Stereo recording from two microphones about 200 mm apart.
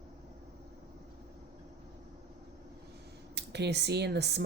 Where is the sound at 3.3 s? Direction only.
55° right (ahead or behind).